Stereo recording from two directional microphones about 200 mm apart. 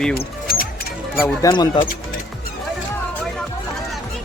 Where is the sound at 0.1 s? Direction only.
45° left (ahead or behind).